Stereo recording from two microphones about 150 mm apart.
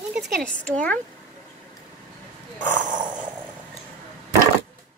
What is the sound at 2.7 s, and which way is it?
Speech, 60° right (ahead or behind).